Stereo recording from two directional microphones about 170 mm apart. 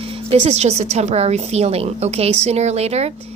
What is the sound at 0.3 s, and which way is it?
A woman's voice, 40° right (ahead or behind).